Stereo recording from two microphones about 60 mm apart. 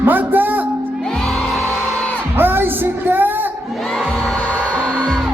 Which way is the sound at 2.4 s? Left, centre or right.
Right.